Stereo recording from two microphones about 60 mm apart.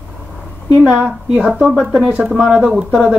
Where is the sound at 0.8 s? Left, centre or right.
Centre.